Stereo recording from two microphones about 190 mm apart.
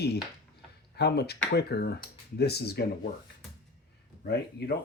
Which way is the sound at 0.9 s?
60° left (ahead or behind).